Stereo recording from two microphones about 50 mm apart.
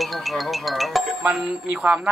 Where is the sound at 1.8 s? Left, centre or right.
Right.